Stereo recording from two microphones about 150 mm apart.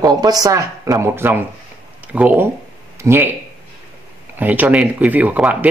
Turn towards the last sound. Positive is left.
turn(degrees=-10)  # may be behind; listen again after turning